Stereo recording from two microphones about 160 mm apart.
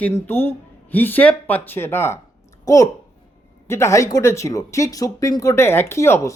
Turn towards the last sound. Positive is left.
turn(degrees=15)  # may be behind; listen again after turning